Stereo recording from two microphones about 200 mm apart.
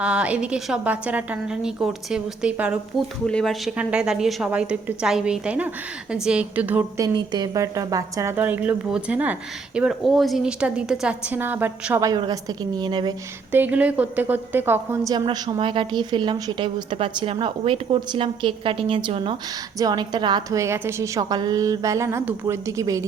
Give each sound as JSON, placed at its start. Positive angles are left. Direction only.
{"t": 0.0, "sound": "a woman's voice", "side_deg": -5}
{"t": 13.5, "sound": "speech", "side_deg": -10}
{"t": 15.3, "sound": "speech", "side_deg": -25}